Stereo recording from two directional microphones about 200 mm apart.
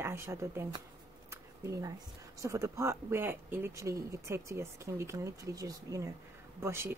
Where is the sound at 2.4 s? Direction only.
15° right (ahead or behind).